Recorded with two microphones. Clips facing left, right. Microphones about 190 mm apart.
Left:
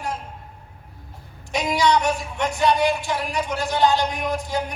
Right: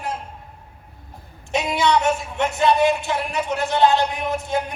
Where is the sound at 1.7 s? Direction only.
25° right (ahead or behind).